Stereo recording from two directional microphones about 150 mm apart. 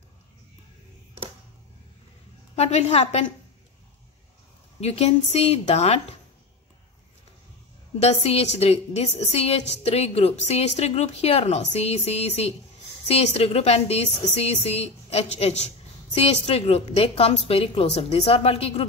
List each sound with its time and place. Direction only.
2.5 s a woman's voice: 45° left (ahead or behind)
4.7 s a woman's voice: 45° left (ahead or behind)
8.0 s a woman's voice: 45° left (ahead or behind)